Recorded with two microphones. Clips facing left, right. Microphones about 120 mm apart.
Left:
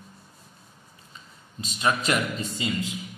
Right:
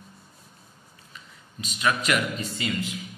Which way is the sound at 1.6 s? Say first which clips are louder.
Even; 30° left (ahead or behind).